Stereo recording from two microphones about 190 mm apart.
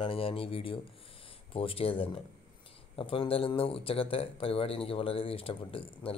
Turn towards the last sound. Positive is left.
turn(degrees=30)  # may be behind; listen again after turning